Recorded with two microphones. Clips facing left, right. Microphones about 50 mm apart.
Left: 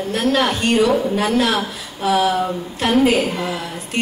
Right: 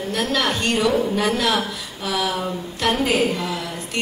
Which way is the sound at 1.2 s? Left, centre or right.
Left.